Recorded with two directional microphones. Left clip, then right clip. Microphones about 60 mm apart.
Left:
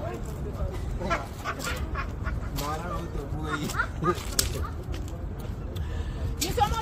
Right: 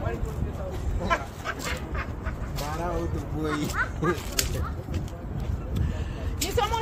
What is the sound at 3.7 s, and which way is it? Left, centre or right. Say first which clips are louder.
Dog: right 1 dB; left.